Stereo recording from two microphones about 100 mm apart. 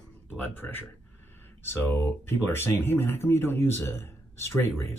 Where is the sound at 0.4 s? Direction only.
20° left (ahead or behind).